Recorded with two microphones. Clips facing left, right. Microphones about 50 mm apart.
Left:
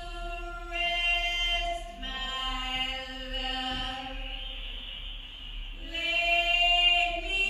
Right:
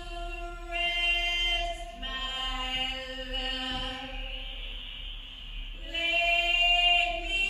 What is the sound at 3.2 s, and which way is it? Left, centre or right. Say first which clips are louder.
Chant: right 1 dB; right.